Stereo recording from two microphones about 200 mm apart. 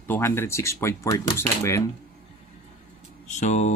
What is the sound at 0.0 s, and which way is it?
Speech, 10° left (ahead or behind).